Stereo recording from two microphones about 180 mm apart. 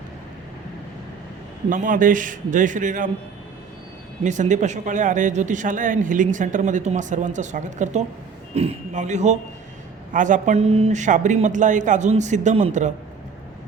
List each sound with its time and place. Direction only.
1.7 s speech: 50° right (ahead or behind)
4.2 s a man's voice: 40° right (ahead or behind)